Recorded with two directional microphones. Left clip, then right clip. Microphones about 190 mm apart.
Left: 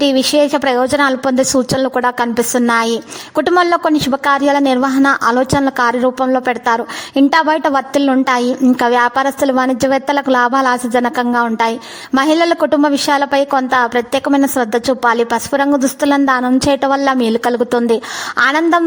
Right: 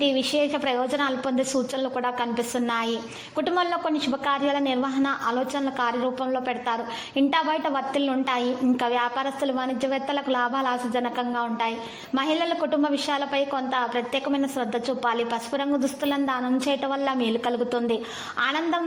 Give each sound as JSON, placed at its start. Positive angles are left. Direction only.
{"t": 0.0, "sound": "a woman's voice", "side_deg": 50}